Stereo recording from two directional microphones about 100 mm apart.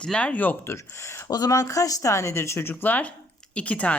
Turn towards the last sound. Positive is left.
turn(degrees=15)  # may be behind; listen again after turning